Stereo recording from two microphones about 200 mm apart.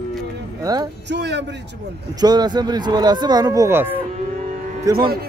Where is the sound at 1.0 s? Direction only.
60° right (ahead or behind).